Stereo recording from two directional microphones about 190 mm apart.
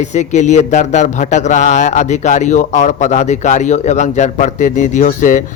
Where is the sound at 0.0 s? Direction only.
40° left (ahead or behind).